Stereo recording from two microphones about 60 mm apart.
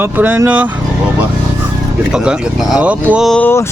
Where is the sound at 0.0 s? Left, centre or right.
Right.